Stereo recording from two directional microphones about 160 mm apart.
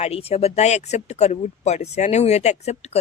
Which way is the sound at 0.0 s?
40° left (ahead or behind).